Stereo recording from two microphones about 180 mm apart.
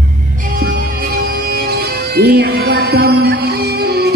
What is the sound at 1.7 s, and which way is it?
Music, 60° right (ahead or behind).